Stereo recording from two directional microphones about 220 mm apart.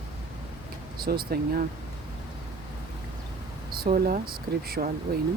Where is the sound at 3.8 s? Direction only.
40° right (ahead or behind).